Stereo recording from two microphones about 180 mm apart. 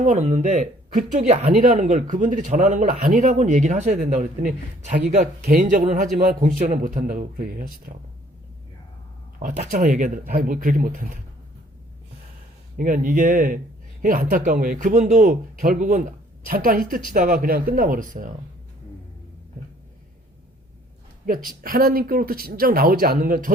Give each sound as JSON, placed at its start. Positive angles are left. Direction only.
{"t": 0.0, "sound": "speech", "side_deg": -40}
{"t": 9.4, "sound": "speech", "side_deg": -45}
{"t": 12.7, "sound": "speech", "side_deg": -50}
{"t": 21.6, "sound": "speech", "side_deg": -55}